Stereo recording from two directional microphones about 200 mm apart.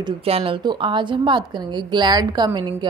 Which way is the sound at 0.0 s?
30° right (ahead or behind).